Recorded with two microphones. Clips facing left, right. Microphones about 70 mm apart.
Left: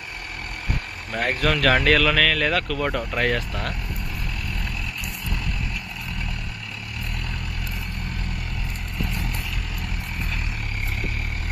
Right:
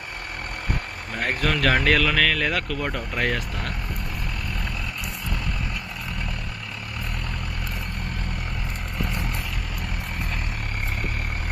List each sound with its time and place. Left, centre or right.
1.3 s speech: right
2.8 s speech: centre